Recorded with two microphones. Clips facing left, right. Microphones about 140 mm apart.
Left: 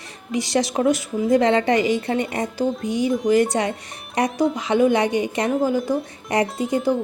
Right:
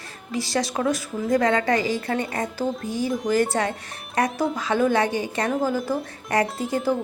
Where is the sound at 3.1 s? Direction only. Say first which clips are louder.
Left 4 dB; centre (ahead or behind).